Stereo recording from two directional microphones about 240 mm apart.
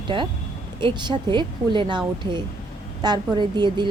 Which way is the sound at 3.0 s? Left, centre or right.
Centre.